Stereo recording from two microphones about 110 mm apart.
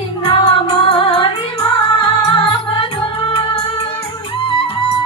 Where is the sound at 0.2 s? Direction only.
55° left (ahead or behind).